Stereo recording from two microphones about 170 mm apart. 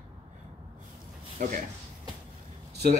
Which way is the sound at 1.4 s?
50° right (ahead or behind).